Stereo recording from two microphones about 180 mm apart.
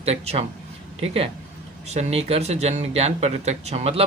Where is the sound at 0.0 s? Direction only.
35° right (ahead or behind).